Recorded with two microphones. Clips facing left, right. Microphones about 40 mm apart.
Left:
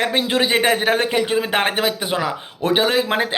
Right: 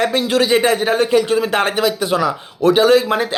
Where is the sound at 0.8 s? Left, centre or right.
Left.